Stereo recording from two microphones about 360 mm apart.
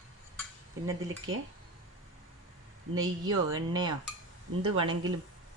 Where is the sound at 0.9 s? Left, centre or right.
Right.